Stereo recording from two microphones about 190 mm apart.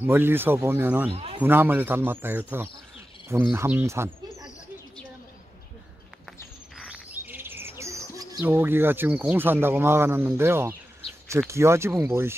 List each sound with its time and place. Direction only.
0.0 s speech: 10° right (ahead or behind)
1.1 s speech: 30° right (ahead or behind)
1.4 s speech: 10° right (ahead or behind)
6.9 s speech: 10° right (ahead or behind)